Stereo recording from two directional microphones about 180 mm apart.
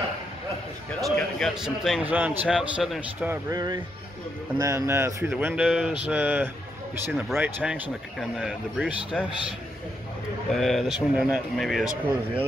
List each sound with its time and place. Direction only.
1.0 s a man's voice: centre (ahead or behind)
3.3 s a man's voice: 20° right (ahead or behind); by 9.3 s centre (ahead or behind)
10.5 s a man's voice: centre (ahead or behind)